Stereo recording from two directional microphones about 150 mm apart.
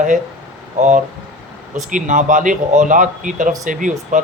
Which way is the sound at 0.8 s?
55° right (ahead or behind).